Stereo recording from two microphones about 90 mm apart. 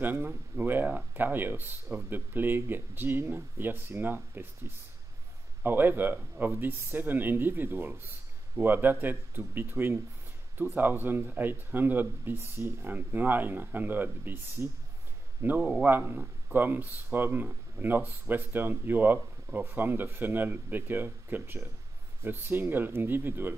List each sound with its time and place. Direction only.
0.0 s speech: 20° right (ahead or behind)